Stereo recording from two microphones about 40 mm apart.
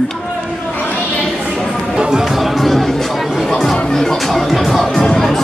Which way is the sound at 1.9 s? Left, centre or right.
Centre.